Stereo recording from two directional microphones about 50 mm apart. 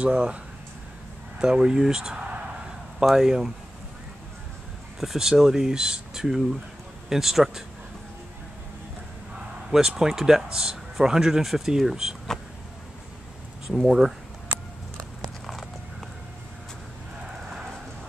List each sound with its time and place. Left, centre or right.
0.0 s speech: right
1.4 s speech: centre
5.0 s speech: centre
9.7 s speech: centre
13.7 s speech: centre
15.2 s a sound: centre